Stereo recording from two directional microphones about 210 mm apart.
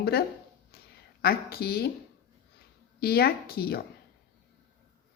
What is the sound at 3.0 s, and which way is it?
Speech, 45° left (ahead or behind).